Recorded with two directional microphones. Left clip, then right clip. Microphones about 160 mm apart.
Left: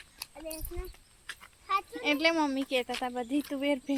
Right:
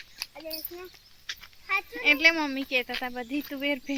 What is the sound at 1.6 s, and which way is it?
Speech, 30° right (ahead or behind).